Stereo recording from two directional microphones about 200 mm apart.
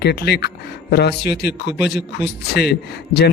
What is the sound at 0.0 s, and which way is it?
A man's voice, 55° left (ahead or behind).